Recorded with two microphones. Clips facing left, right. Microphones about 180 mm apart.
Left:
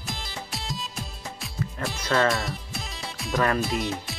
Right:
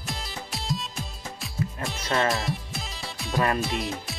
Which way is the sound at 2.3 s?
Centre (ahead or behind).